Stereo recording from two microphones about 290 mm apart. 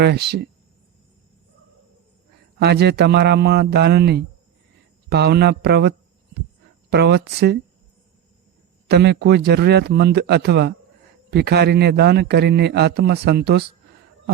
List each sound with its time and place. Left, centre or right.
0.0 s a man's voice: right
2.6 s a man's voice: right
6.9 s a man's voice: right
8.9 s a man's voice: right